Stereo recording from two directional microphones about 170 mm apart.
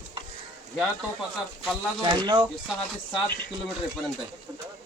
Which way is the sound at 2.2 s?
25° right (ahead or behind).